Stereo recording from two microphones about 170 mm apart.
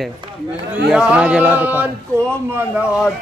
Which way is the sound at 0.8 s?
5° right (ahead or behind).